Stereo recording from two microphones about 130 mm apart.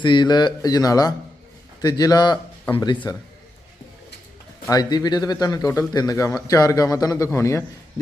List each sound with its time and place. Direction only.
0.0 s speech: 35° left (ahead or behind)
4.7 s speech: 30° left (ahead or behind)